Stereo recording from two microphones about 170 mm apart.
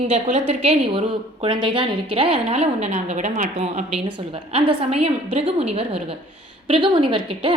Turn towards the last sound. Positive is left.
turn(degrees=-30)  # may be behind; listen again after turning